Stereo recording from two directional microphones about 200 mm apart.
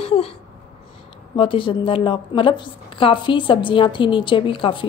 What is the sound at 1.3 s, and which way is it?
A woman's voice, 25° left (ahead or behind).